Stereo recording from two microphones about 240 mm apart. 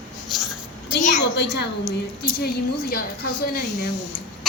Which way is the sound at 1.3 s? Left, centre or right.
Left.